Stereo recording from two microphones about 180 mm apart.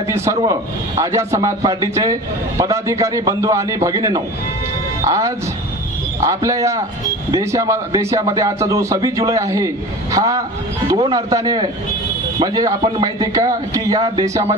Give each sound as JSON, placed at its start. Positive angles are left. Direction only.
{"t": 0.1, "sound": "a man's voice", "side_deg": -15}